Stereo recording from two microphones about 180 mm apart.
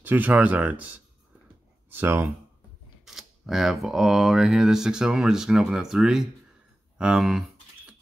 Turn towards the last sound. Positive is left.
turn(degrees=0)  # may be behind; listen again after turning